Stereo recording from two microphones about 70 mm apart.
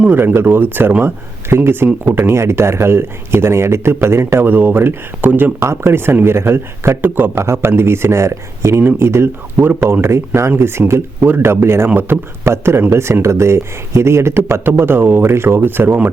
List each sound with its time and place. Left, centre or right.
0.4 s speech: right
5.6 s speech: right